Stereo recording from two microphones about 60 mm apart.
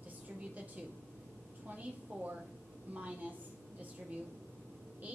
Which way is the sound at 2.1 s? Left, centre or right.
Centre.